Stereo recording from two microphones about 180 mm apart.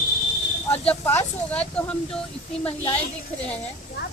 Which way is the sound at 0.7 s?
10° left (ahead or behind).